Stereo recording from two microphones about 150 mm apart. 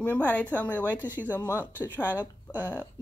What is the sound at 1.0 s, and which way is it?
Speech, 10° right (ahead or behind).